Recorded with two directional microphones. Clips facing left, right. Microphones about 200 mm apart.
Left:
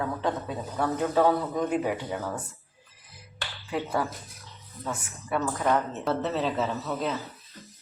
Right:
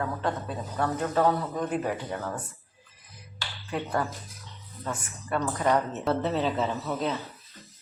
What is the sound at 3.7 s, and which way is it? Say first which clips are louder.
A woman's voice: left 1 dB; 5° left (ahead or behind).